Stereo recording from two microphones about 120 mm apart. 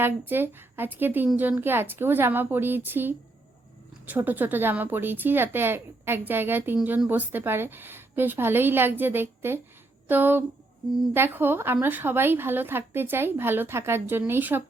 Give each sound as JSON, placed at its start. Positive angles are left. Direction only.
{"t": 0.0, "sound": "a woman's voice", "side_deg": -15}